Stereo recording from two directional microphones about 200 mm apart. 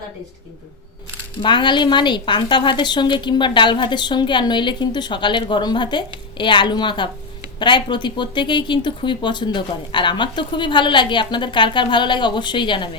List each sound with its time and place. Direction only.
1.4 s a woman's voice: 25° left (ahead or behind)